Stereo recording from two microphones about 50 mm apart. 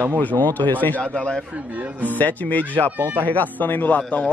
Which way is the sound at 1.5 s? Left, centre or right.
Right.